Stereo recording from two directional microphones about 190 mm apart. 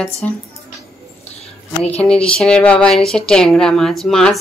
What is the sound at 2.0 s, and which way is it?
A woman's voice, 5° left (ahead or behind).